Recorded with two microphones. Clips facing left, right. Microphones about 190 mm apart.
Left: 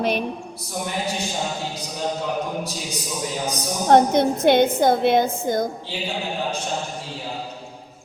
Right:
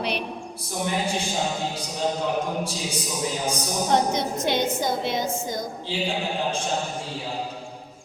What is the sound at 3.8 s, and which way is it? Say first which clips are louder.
A woman's voice: left 8 dB; 55° left (ahead or behind).